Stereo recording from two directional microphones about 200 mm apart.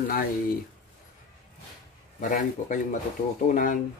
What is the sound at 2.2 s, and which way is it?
Speech, 40° left (ahead or behind).